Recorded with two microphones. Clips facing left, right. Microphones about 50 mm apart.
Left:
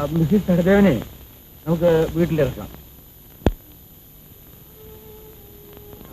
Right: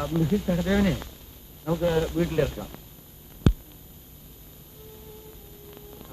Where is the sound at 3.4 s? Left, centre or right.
Left.